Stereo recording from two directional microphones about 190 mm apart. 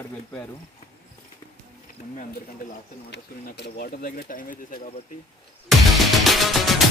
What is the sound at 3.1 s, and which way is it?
Speech, 60° left (ahead or behind).